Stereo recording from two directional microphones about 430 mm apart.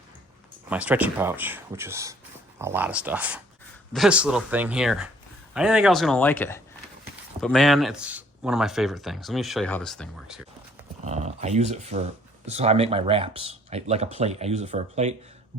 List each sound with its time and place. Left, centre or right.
0.7 s speech: centre
11.0 s speech: centre